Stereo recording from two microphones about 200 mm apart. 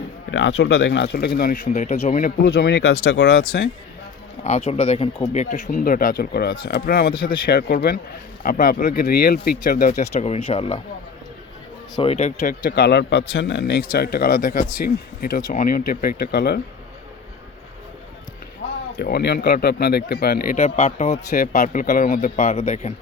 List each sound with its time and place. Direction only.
0.3 s speech: 65° left (ahead or behind)
1.4 s speech: 45° left (ahead or behind)
4.4 s speech: 30° left (ahead or behind)
11.9 s speech: 30° left (ahead or behind); by 16.6 s 55° left (ahead or behind)
18.9 s speech: 55° left (ahead or behind)
20.7 s speech: 30° left (ahead or behind)